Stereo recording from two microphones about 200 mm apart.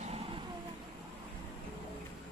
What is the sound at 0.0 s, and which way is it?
Vehicle, 30° right (ahead or behind).